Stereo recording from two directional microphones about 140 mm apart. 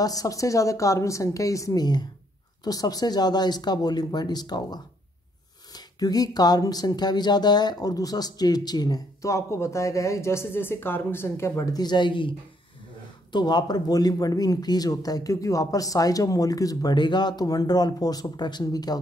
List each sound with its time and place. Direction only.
0.0 s speech: 25° left (ahead or behind)
13.3 s speech: 30° left (ahead or behind)